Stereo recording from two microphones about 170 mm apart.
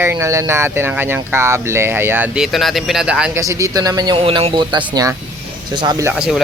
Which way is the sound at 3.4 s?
20° right (ahead or behind).